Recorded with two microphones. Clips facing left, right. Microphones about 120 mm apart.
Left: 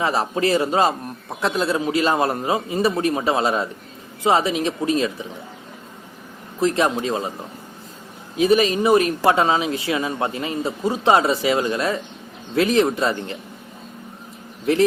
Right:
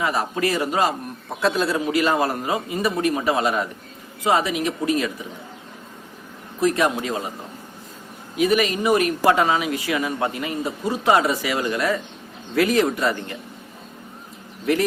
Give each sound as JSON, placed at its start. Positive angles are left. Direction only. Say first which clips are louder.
{"t": 0.0, "sound": "speech", "louder": "left 2 dB", "side_deg": 25}
{"t": 6.6, "sound": "speech", "louder": "left 1 dB", "side_deg": 25}
{"t": 8.4, "sound": "speech", "louder": "left 3 dB", "side_deg": 25}
{"t": 14.7, "sound": "speech", "louder": "left 2 dB", "side_deg": 25}